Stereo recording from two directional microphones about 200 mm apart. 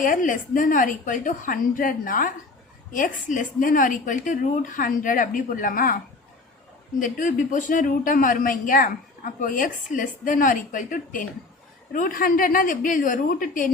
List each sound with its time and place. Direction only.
0.0 s a woman's voice: 40° left (ahead or behind)
7.0 s a woman's voice: 40° left (ahead or behind)